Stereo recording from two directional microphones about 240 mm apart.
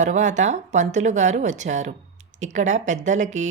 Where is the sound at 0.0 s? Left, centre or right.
Right.